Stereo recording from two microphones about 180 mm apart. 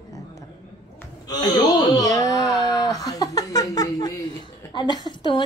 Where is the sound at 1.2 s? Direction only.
20° left (ahead or behind).